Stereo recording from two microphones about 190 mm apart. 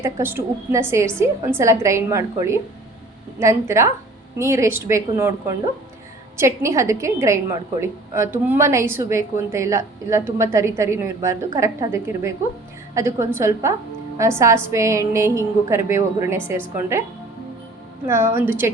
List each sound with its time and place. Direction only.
0.0 s a woman's voice: 10° right (ahead or behind)
6.3 s a woman's voice: 15° right (ahead or behind)
18.0 s a woman's voice: 15° right (ahead or behind)